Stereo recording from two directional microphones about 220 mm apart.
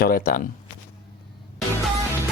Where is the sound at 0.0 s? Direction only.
45° left (ahead or behind).